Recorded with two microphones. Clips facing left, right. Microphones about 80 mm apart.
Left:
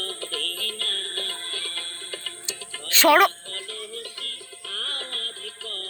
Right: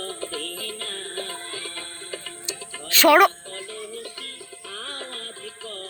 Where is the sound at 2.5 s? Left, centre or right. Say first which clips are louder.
Right 2 dB; left.